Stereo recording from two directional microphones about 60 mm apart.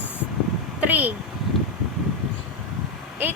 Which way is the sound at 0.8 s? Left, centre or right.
Right.